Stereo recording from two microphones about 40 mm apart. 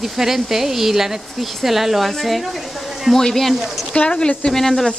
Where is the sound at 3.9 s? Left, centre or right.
Left.